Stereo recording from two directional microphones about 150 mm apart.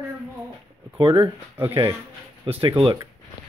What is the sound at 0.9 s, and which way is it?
Speech, 35° right (ahead or behind).